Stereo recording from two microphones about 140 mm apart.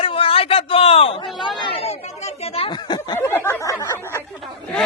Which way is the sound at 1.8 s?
45° left (ahead or behind).